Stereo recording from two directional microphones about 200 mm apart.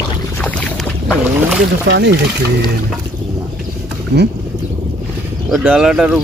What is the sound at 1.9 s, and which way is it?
Speech, 55° right (ahead or behind).